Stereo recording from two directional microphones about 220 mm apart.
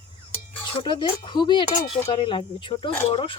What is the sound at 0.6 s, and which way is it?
Speech, 20° left (ahead or behind).